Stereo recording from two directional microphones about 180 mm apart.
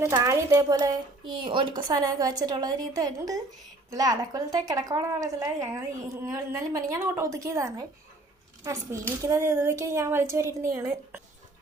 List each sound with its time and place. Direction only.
0.0 s a woman's voice: 15° right (ahead or behind)